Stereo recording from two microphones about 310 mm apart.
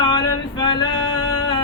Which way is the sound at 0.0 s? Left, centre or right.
Centre.